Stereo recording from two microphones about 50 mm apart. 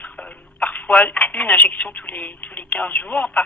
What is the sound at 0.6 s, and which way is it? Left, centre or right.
A woman's voice, left.